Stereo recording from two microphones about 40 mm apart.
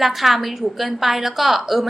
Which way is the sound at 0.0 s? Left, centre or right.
Centre.